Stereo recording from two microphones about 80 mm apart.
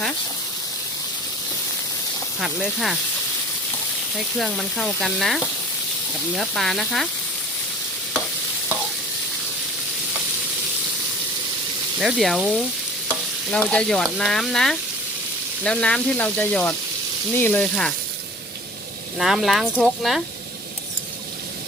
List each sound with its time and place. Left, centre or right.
2.4 s frying: centre
4.1 s frying: centre
11.9 s frying: centre
13.5 s frying: centre
17.3 s speech: left
17.6 s frying: centre
19.2 s frying: centre